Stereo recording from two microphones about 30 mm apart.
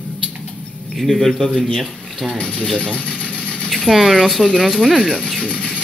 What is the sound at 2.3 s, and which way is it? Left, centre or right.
Mechanisms, left.